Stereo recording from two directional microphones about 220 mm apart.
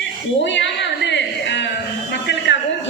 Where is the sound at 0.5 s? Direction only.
55° left (ahead or behind).